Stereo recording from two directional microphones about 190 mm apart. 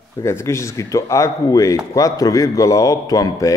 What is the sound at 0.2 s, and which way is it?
A man's voice, 15° left (ahead or behind).